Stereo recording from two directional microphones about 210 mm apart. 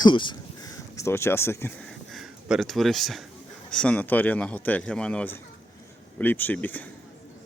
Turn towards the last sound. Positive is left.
turn(degrees=10)  # may be behind; listen again after turning